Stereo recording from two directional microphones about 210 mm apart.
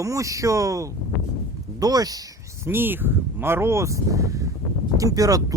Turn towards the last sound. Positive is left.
turn(degrees=-15)  # may be behind; listen again after turning